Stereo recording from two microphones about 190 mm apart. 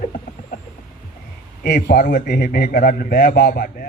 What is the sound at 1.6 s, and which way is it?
A man's voice, 55° left (ahead or behind).